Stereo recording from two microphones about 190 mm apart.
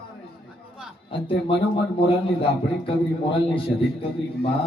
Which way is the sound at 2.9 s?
30° left (ahead or behind).